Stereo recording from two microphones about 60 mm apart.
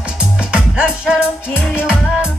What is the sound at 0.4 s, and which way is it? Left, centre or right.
Music, centre.